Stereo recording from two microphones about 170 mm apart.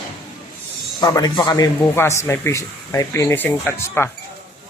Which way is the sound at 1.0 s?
20° left (ahead or behind).